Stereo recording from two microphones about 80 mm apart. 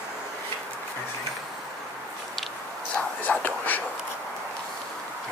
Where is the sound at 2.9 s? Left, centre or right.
Centre.